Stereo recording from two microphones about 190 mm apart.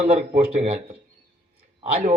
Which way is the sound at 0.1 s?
35° right (ahead or behind).